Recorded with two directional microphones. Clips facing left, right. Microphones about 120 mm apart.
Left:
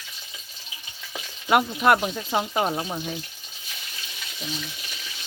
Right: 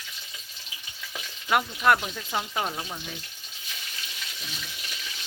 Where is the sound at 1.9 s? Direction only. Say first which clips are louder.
Left 5 dB; 25° left (ahead or behind).